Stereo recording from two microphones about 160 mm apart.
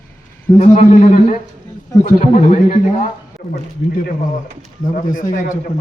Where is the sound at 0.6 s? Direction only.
50° left (ahead or behind).